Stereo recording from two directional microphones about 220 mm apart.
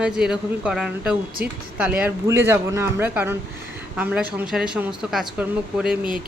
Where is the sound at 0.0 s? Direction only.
5° right (ahead or behind).